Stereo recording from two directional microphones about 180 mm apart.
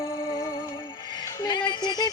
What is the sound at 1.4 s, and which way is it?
Music, 25° left (ahead or behind).